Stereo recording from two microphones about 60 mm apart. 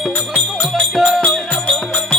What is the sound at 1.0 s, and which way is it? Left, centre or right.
Music, centre.